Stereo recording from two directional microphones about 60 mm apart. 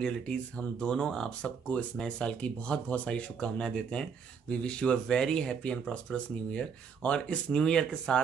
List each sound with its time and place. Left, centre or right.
0.0 s speech: centre